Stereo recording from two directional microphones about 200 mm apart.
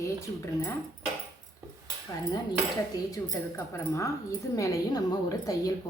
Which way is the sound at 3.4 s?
20° left (ahead or behind).